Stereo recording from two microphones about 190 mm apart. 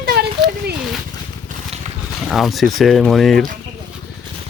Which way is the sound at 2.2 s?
Centre (ahead or behind).